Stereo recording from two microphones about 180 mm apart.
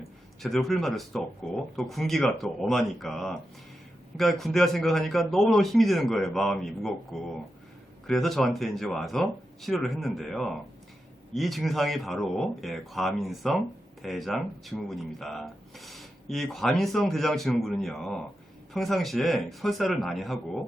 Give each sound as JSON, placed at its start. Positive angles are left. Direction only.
{"t": 0.4, "sound": "speech", "side_deg": 0}